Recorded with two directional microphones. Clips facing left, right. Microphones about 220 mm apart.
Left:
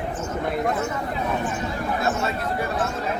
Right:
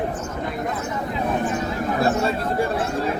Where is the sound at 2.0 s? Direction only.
30° right (ahead or behind).